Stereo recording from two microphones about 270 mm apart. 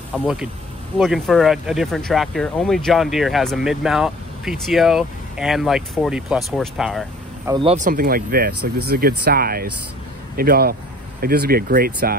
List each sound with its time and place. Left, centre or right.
0.1 s speech: centre
7.5 s speech: right